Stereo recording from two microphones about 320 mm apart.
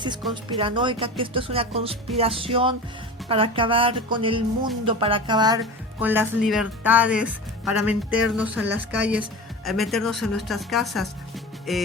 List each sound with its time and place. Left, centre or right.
0.5 s speech: centre